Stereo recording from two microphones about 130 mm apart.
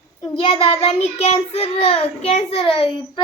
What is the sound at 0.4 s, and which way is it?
A child's voice, 40° left (ahead or behind).